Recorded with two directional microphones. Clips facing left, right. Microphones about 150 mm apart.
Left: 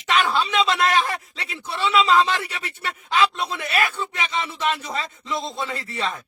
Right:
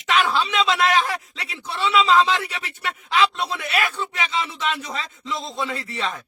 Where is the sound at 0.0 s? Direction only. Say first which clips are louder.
Even; centre (ahead or behind).